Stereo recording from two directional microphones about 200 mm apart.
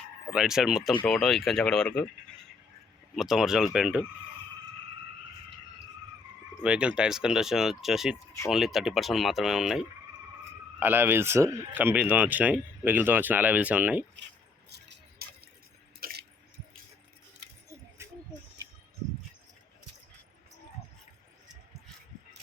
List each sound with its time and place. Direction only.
0.3 s speech: centre (ahead or behind)
3.2 s speech: centre (ahead or behind)
6.6 s speech: 5° right (ahead or behind)
14.7 s drip: 55° right (ahead or behind)
16.0 s a sound: 45° right (ahead or behind)